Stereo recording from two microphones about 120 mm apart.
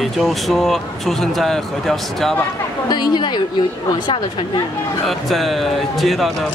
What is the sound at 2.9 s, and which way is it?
Speech, 35° left (ahead or behind).